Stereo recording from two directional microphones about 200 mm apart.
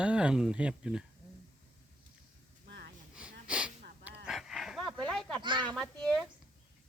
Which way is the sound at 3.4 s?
5° right (ahead or behind).